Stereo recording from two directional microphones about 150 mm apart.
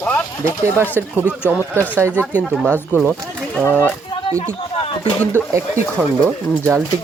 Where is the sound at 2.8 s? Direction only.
10° left (ahead or behind).